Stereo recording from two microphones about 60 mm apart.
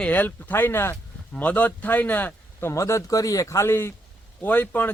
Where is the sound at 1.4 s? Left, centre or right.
Left.